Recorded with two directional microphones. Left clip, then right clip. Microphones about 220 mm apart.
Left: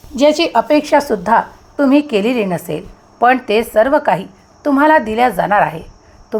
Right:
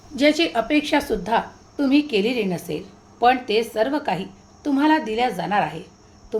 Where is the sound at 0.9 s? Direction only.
10° left (ahead or behind).